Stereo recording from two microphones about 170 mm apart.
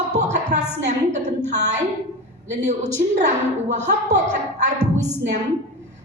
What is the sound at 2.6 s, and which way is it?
A woman's voice, 45° right (ahead or behind).